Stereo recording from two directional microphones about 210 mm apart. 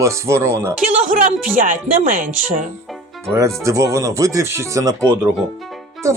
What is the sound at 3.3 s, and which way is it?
Speech, 15° right (ahead or behind).